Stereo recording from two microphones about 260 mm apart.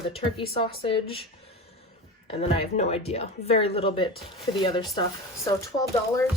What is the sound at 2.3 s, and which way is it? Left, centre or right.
Speech, left.